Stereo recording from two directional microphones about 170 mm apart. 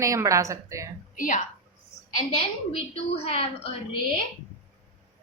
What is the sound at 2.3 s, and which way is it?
A woman's voice, 35° left (ahead or behind).